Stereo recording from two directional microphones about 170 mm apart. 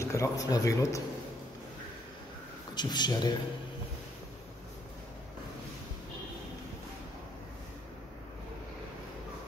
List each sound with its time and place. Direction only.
0.0 s speech: 20° left (ahead or behind)
2.7 s speech: 25° left (ahead or behind)